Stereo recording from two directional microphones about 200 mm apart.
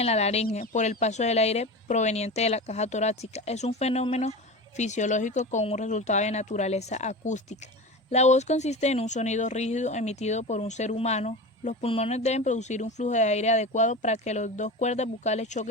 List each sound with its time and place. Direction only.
0.0 s speech: 30° left (ahead or behind)